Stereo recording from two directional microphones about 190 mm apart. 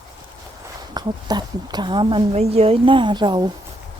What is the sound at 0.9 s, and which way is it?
Speech, 20° right (ahead or behind).